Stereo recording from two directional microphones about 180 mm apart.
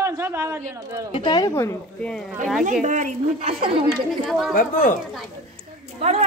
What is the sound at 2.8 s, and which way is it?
Speech, 40° right (ahead or behind).